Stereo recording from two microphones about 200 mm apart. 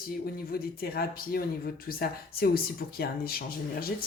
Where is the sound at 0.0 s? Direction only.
50° left (ahead or behind).